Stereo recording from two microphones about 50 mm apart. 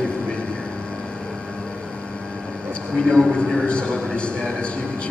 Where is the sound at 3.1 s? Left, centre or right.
Centre.